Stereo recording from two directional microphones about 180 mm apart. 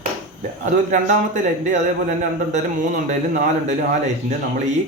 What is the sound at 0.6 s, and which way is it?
A man's voice, 40° right (ahead or behind).